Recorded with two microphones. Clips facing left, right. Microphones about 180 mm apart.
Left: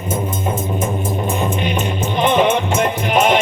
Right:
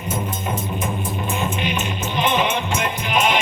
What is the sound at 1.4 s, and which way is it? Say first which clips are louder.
Music: left 4 dB; 50° left (ahead or behind).